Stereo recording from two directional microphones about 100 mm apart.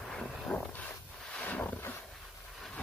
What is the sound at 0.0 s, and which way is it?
Dog, 5° left (ahead or behind).